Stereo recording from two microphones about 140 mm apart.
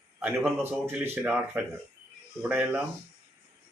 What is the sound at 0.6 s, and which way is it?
Speech, 15° right (ahead or behind).